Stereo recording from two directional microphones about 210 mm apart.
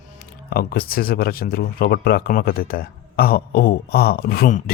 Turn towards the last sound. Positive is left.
turn(degrees=45)  # may be behind; listen again after turning